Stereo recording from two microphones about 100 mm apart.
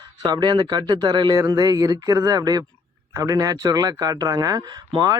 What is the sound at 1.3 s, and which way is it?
Speech, 35° right (ahead or behind).